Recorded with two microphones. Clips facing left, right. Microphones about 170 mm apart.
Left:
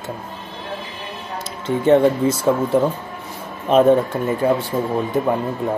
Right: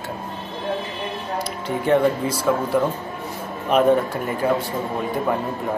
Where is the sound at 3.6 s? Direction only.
25° left (ahead or behind).